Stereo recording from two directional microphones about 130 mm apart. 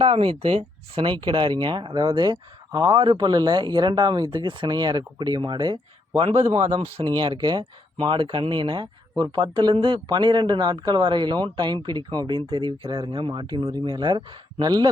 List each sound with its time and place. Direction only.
0.0 s speech: 45° right (ahead or behind)
7.2 s speech: 35° right (ahead or behind)